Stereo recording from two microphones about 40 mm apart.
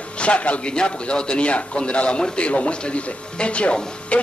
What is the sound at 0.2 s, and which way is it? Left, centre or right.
A man's voice, left.